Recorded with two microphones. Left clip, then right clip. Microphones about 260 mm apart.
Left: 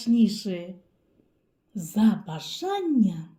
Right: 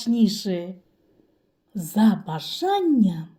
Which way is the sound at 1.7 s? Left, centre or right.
Right.